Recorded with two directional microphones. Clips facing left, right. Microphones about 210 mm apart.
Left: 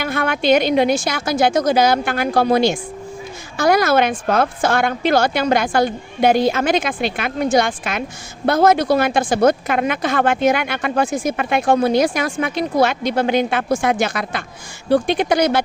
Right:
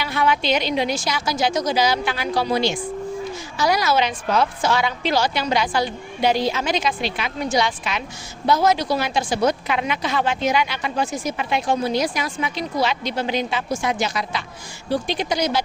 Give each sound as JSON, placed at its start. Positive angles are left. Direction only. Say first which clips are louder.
{"t": 0.0, "sound": "a woman's voice", "louder": "left 2 dB", "side_deg": 50}